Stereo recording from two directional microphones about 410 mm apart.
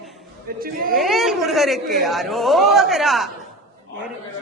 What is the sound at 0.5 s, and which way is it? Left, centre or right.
Chatter, right.